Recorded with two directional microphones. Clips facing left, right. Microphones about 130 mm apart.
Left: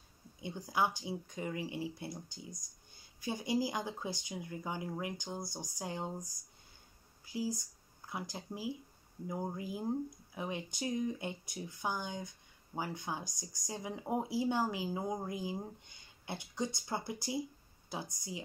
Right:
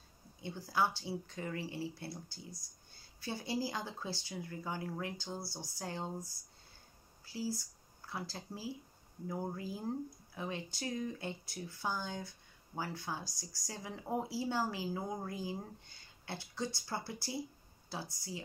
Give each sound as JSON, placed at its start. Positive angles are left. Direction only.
{"t": 0.4, "sound": "speech", "side_deg": 15}